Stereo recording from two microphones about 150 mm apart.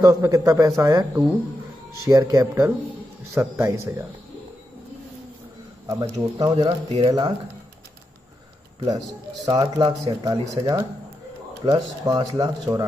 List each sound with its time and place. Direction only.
0.0 s speech: 25° right (ahead or behind)
5.9 s speech: 25° right (ahead or behind)
6.5 s speech: 40° right (ahead or behind)
7.1 s speech: 25° right (ahead or behind)
9.5 s speech: 25° right (ahead or behind)